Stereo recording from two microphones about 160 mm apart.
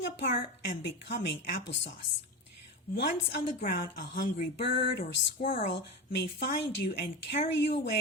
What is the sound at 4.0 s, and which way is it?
Speech, 90° left.